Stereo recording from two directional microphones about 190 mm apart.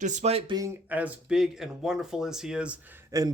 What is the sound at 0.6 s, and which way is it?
A man's voice, 10° right (ahead or behind).